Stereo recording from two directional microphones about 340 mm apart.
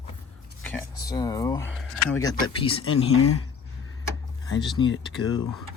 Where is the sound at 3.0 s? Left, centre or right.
Left.